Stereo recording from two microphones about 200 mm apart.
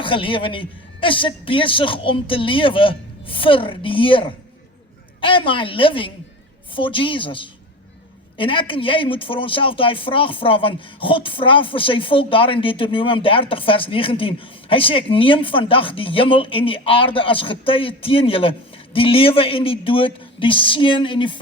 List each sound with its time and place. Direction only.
0.0 s speech: 25° left (ahead or behind)